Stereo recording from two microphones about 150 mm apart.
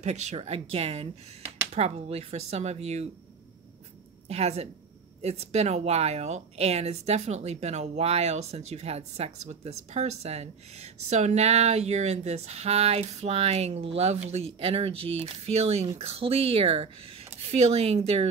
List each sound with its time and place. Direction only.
0.0 s speech: 50° right (ahead or behind)
4.3 s speech: 45° right (ahead or behind)